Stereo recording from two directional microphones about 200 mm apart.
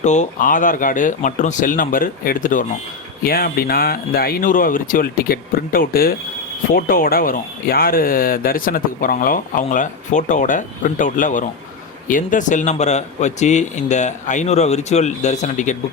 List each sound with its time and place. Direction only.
0.0 s a man's voice: 35° left (ahead or behind)